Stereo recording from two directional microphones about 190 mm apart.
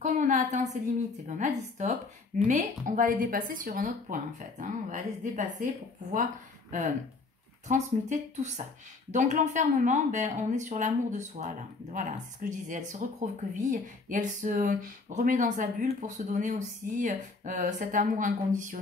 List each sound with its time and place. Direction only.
0.0 s speech: 45° right (ahead or behind)
6.7 s speech: 45° right (ahead or behind)